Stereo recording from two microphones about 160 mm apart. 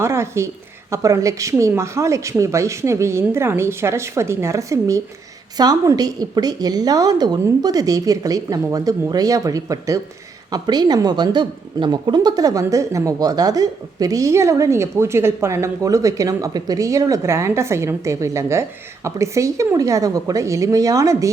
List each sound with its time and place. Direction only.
0.0 s a woman's voice: 15° right (ahead or behind)